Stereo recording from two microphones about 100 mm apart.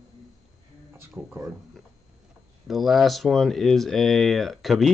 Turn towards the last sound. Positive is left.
turn(degrees=0)  # may be behind; listen again after turning